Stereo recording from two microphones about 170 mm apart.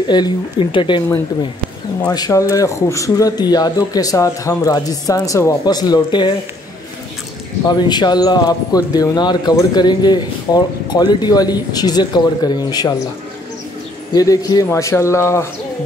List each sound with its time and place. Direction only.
0.1 s speech: 25° left (ahead or behind)
2.1 s speech: 20° left (ahead or behind)
7.6 s speech: 25° left (ahead or behind)
14.1 s a man's voice: 20° left (ahead or behind)